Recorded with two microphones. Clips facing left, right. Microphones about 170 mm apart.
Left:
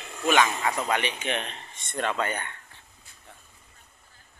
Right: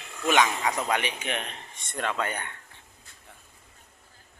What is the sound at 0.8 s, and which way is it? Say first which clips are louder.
A man's voice: left 1 dB; 10° right (ahead or behind).